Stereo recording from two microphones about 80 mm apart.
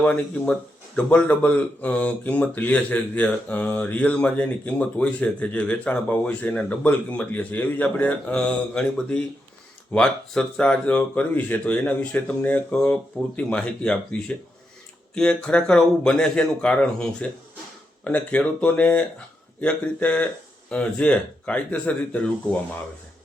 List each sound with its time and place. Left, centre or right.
0.0 s speech: centre